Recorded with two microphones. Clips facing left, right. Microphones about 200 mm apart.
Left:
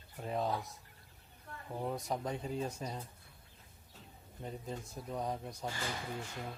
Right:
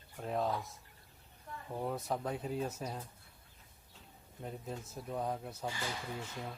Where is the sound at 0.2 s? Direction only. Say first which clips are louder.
Right 1 dB; centre (ahead or behind).